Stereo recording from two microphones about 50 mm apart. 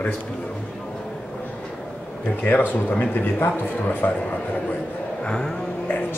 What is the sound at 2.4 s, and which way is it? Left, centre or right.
Speech, left.